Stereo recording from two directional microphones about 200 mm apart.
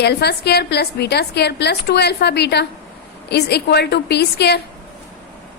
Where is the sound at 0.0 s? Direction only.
55° left (ahead or behind).